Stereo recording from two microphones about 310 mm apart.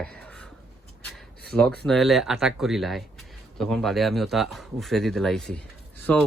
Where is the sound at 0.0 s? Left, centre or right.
Centre.